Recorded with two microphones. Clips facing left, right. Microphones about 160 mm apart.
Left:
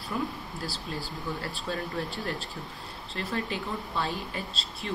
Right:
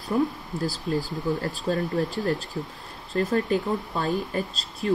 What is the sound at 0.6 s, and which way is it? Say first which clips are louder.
Speech: right 11 dB; 40° right (ahead or behind).